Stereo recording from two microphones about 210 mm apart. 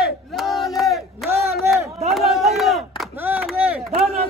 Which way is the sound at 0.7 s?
Centre (ahead or behind).